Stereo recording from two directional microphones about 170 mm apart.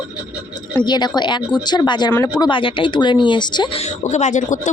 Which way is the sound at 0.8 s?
25° left (ahead or behind).